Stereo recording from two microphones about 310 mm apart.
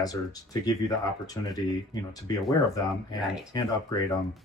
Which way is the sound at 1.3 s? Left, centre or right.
Centre.